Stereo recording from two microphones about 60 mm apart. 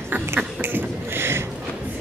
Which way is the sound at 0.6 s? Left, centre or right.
Right.